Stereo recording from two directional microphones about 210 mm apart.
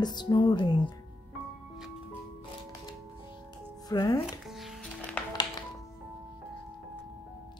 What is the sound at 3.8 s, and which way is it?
Speech, 15° left (ahead or behind).